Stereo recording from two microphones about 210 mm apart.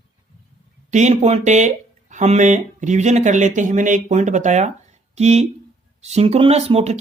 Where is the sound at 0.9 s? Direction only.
35° right (ahead or behind).